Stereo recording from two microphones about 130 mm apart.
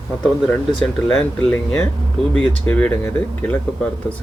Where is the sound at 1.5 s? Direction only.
15° left (ahead or behind).